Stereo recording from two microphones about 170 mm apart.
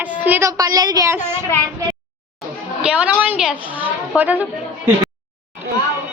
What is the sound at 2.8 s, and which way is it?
A woman's voice, 5° right (ahead or behind).